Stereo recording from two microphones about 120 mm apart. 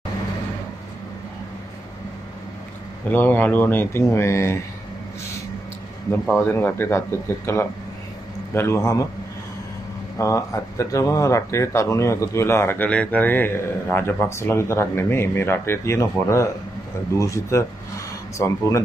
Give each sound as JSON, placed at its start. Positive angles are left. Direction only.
{"t": 3.1, "sound": "speech", "side_deg": 15}
{"t": 6.3, "sound": "speech", "side_deg": 20}
{"t": 10.1, "sound": "speech", "side_deg": 25}